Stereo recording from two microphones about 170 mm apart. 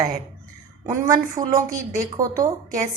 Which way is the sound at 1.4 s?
20° right (ahead or behind).